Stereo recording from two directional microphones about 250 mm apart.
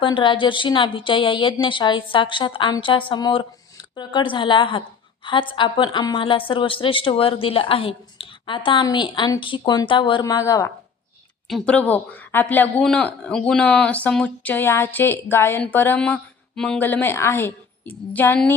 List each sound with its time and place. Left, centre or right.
0.0 s a woman's voice: centre